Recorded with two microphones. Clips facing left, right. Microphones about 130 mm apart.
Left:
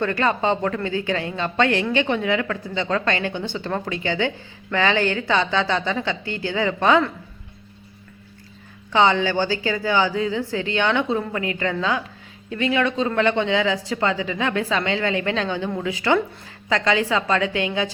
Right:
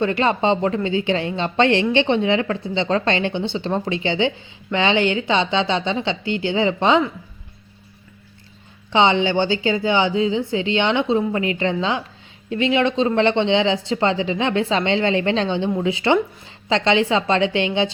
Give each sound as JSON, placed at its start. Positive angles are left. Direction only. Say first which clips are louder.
{"t": 0.0, "sound": "a woman's voice", "louder": "right 2 dB", "side_deg": -20}
{"t": 8.9, "sound": "a woman's voice", "louder": "right 1 dB", "side_deg": -20}